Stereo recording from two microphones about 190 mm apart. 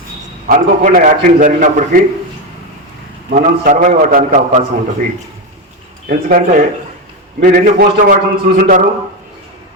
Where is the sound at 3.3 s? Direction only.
45° right (ahead or behind).